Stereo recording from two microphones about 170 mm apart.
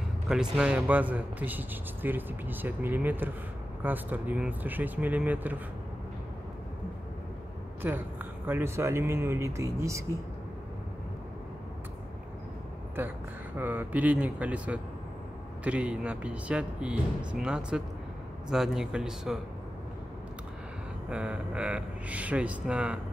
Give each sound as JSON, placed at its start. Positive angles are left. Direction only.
{"t": 0.3, "sound": "speech", "side_deg": -5}
{"t": 7.8, "sound": "speech", "side_deg": -10}
{"t": 13.6, "sound": "speech", "side_deg": -10}
{"t": 21.1, "sound": "speech", "side_deg": -5}